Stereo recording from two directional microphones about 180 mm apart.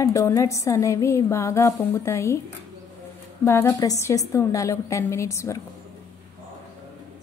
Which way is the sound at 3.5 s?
15° left (ahead or behind).